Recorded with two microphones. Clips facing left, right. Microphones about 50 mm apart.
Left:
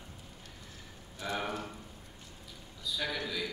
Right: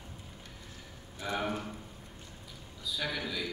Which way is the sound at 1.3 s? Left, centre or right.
Centre.